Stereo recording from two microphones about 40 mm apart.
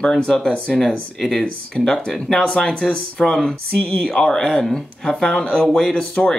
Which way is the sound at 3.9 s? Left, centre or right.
Left.